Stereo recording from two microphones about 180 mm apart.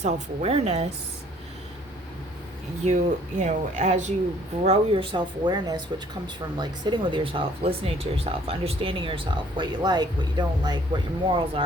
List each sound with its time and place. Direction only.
0.0 s speech: 35° right (ahead or behind)
2.8 s speech: 40° right (ahead or behind)